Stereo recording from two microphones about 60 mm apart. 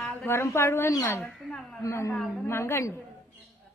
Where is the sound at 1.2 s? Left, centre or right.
Centre.